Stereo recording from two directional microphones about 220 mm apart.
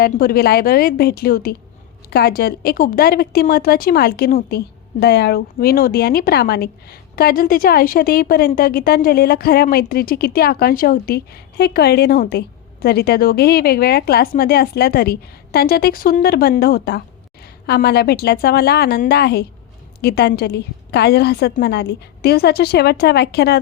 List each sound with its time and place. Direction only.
0.0 s a woman's voice: 45° left (ahead or behind)